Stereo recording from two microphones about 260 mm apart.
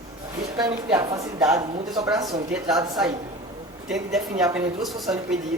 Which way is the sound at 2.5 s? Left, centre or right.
Centre.